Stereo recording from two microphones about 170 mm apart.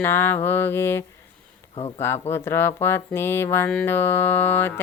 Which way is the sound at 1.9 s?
15° left (ahead or behind).